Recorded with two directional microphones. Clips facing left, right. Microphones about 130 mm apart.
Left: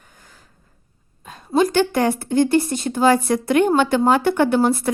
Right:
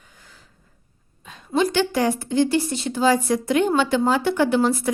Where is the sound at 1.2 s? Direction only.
45° left (ahead or behind).